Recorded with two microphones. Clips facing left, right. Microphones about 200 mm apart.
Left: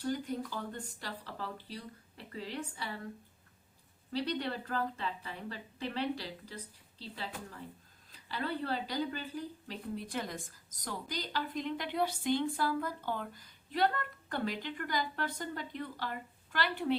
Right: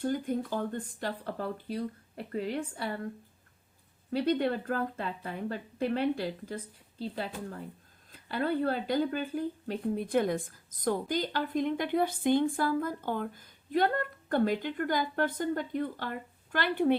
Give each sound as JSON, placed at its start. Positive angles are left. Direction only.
{"t": 0.0, "sound": "speech", "side_deg": -50}
{"t": 4.1, "sound": "speech", "side_deg": -50}
{"t": 8.1, "sound": "speech", "side_deg": -50}